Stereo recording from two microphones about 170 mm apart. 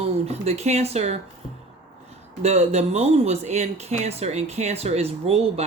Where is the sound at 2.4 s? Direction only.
40° right (ahead or behind).